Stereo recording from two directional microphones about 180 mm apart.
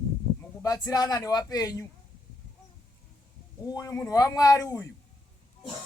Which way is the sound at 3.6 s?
20° left (ahead or behind).